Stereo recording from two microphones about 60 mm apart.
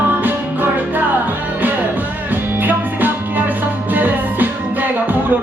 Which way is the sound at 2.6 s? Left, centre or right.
Right.